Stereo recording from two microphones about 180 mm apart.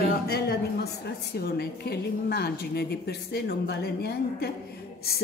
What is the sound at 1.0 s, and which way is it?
A woman's voice, 60° left (ahead or behind).